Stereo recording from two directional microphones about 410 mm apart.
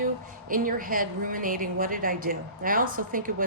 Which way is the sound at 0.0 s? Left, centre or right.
Centre.